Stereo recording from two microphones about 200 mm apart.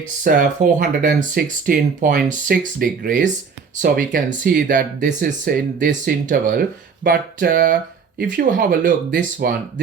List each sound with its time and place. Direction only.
0.3 s speech: 45° right (ahead or behind)